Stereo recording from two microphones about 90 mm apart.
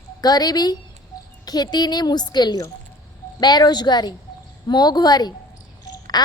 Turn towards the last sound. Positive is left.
turn(degrees=50)  # may be behind; listen again after turning